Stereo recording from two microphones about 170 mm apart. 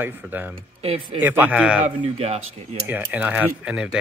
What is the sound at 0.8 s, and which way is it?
Speech, 35° right (ahead or behind).